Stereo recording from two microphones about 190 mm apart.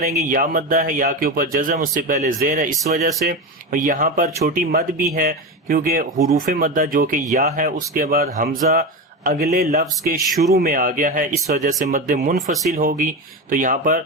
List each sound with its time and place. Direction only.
0.0 s speech: 40° right (ahead or behind)